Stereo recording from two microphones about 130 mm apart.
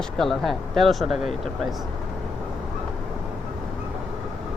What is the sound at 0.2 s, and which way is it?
Speech, centre (ahead or behind).